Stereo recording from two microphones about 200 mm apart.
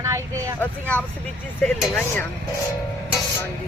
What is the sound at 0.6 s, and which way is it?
Speech, 5° left (ahead or behind).